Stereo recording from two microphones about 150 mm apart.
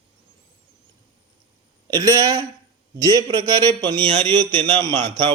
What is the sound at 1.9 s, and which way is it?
A man's voice, 25° right (ahead or behind).